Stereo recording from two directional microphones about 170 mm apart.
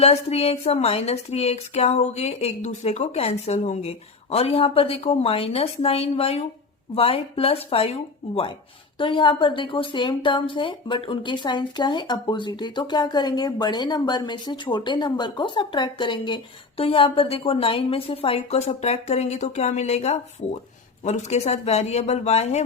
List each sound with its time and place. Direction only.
0.0 s speech: 35° left (ahead or behind)
9.0 s a woman's voice: 30° left (ahead or behind)